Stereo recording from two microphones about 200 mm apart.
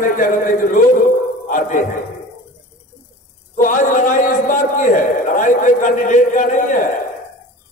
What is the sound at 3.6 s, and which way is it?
A man's voice, 40° left (ahead or behind).